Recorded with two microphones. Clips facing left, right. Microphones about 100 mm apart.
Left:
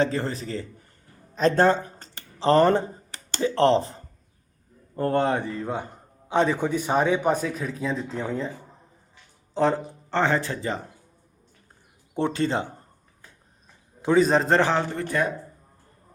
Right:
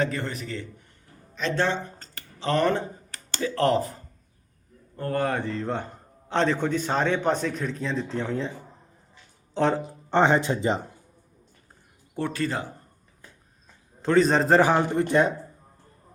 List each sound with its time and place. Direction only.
0.0 s a man's voice: 30° left (ahead or behind); by 8.5 s 5° left (ahead or behind)
9.6 s speech: centre (ahead or behind)
10.1 s speech: 20° right (ahead or behind)
12.1 s speech: 25° left (ahead or behind)
14.0 s a man's voice: 5° left (ahead or behind); by 15.3 s 20° right (ahead or behind)